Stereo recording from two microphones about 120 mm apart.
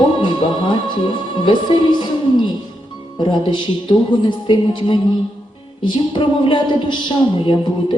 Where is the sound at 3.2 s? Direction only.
40° left (ahead or behind).